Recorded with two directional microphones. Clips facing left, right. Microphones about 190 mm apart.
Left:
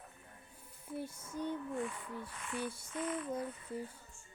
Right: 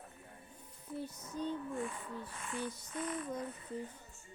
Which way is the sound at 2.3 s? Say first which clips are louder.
Even; 30° right (ahead or behind).